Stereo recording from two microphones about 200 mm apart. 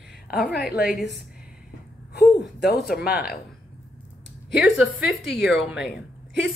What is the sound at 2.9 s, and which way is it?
Speech, 50° left (ahead or behind).